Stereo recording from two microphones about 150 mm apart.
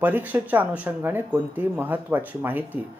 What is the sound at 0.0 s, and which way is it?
Speech, 10° right (ahead or behind).